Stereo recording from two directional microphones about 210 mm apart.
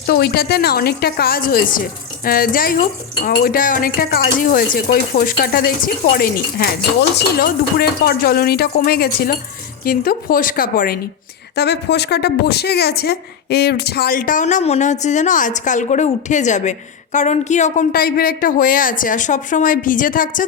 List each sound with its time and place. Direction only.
0.0 s a woman's voice: 45° left (ahead or behind)